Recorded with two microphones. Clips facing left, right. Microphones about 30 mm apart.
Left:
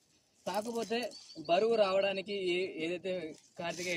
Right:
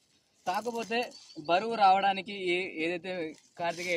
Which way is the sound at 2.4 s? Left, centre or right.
Right.